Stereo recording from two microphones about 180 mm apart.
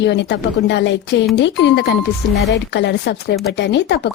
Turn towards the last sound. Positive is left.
turn(degrees=70)  # may be behind; listen again after turning